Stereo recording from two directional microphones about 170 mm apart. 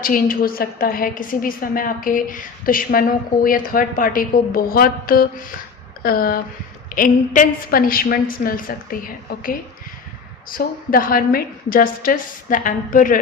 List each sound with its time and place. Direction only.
0.0 s a woman's voice: 55° left (ahead or behind)